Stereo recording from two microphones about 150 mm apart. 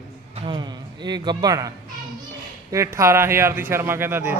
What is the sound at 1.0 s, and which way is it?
Speech, 30° right (ahead or behind).